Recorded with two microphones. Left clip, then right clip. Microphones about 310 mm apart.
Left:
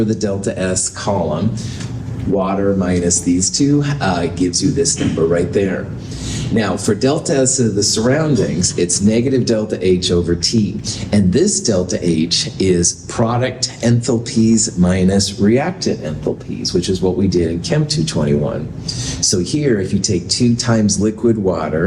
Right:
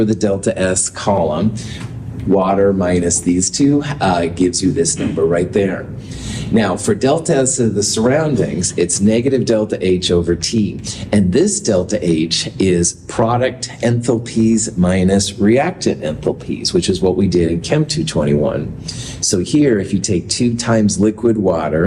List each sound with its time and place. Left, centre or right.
0.0 s speech: right
2.8 s speech: right